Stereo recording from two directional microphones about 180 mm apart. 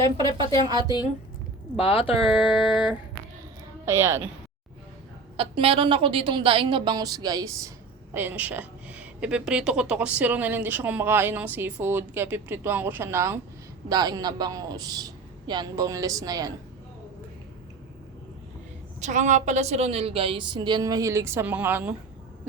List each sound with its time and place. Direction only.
0.0 s a woman's voice: 25° right (ahead or behind)
1.7 s speech: 30° left (ahead or behind)
2.4 s a sound: 25° left (ahead or behind)
3.8 s a woman's voice: 15° right (ahead or behind)
5.4 s a woman's voice: 30° right (ahead or behind)
18.9 s a woman's voice: 40° right (ahead or behind); by 21.9 s 10° right (ahead or behind)